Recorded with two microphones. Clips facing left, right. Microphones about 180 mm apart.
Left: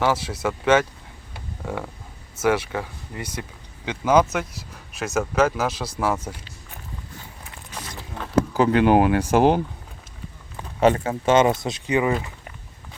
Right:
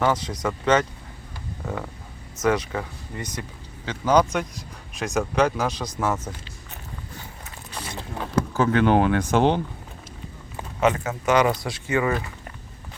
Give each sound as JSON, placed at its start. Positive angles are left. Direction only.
{"t": 0.0, "sound": "speech", "side_deg": 5}
{"t": 7.8, "sound": "a sound", "side_deg": -30}
{"t": 8.5, "sound": "speech", "side_deg": 10}
{"t": 10.8, "sound": "speech", "side_deg": 30}